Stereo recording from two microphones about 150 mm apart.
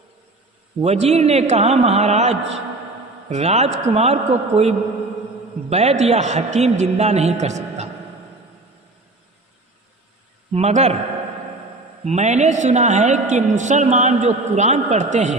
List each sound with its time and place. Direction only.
0.8 s a woman's voice: 45° right (ahead or behind)
10.5 s a woman's voice: 45° right (ahead or behind)
12.0 s a woman's voice: 50° right (ahead or behind)